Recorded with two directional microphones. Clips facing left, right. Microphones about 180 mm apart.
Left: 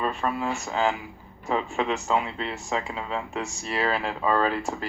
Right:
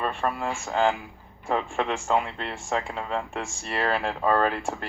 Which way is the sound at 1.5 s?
50° right (ahead or behind).